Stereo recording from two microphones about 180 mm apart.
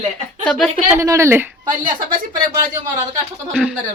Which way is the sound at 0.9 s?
15° right (ahead or behind).